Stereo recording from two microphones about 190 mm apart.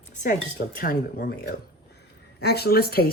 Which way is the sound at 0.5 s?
50° left (ahead or behind).